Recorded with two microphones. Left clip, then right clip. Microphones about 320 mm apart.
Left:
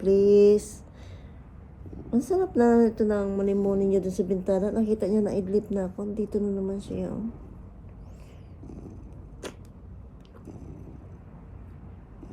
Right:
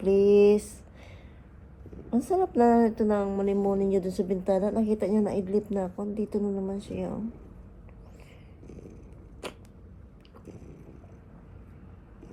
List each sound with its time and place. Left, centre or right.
0.0 s a sound: centre
2.1 s a woman's voice: centre
8.6 s purr: centre
10.4 s vehicle: centre